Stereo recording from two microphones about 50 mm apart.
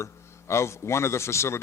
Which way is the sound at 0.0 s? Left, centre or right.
Left.